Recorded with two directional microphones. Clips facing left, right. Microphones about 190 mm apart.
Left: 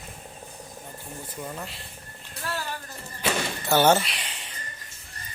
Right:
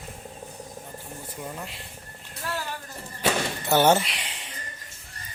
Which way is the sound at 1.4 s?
5° right (ahead or behind).